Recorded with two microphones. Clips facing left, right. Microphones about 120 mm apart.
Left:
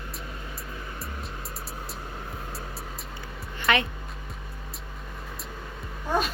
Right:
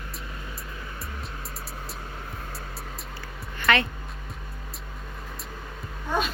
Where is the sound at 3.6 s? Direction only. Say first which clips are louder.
Right 1 dB; 20° left (ahead or behind).